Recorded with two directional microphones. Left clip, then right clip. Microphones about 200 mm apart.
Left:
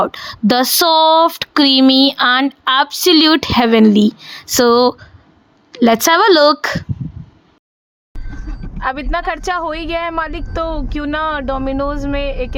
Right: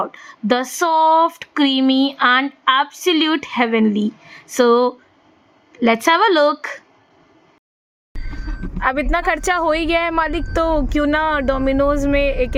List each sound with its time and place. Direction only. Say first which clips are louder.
0.0 s speech: left 7 dB; 40° left (ahead or behind)
8.8 s speech: right 1 dB; 5° left (ahead or behind)